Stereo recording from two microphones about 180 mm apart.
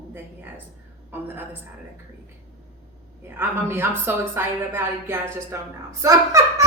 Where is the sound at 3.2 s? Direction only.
15° right (ahead or behind).